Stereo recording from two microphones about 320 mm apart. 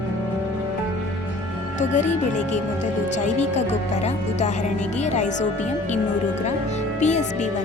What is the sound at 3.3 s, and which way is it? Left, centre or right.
Speech, left.